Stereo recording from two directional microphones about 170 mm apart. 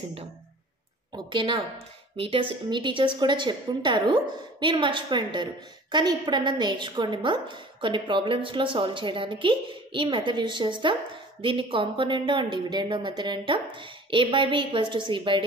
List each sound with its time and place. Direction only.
1.1 s a woman's voice: 30° right (ahead or behind)